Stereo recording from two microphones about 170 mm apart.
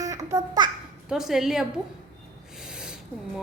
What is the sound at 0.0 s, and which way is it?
Babbling, 20° right (ahead or behind).